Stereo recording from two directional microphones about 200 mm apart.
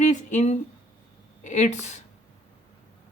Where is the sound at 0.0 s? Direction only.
35° left (ahead or behind).